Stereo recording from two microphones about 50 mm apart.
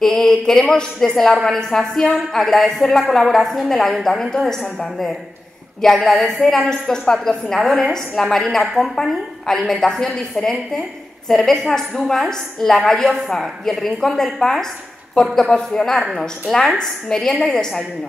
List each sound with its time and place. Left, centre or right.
0.0 s a woman's voice: centre